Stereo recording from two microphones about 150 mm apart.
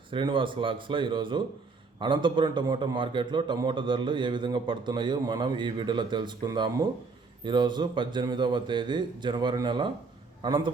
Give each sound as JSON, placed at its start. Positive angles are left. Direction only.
{"t": 0.1, "sound": "a man's voice", "side_deg": -35}